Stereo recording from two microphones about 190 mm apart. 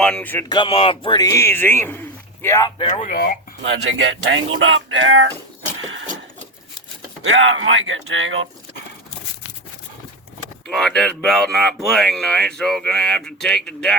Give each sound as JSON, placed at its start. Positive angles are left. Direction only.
{"t": 0.0, "sound": "speech", "side_deg": 5}
{"t": 0.4, "sound": "speech", "side_deg": 25}
{"t": 3.0, "sound": "speech", "side_deg": 50}
{"t": 3.6, "sound": "speech", "side_deg": -75}
{"t": 7.3, "sound": "speech", "side_deg": -85}
{"t": 10.7, "sound": "speech", "side_deg": 5}